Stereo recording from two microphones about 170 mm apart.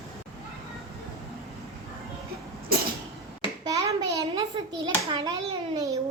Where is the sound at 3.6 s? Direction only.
20° right (ahead or behind).